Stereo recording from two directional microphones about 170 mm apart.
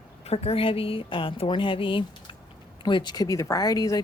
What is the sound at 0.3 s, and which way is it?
Speech, 35° left (ahead or behind).